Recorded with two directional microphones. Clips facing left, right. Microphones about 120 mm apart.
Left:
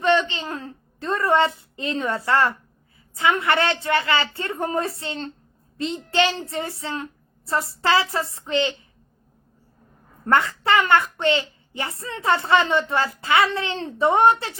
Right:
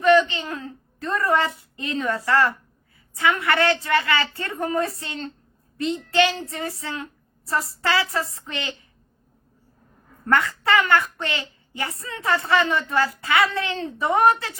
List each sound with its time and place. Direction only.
0.0 s a woman's voice: 25° left (ahead or behind)
10.2 s a woman's voice: 25° left (ahead or behind)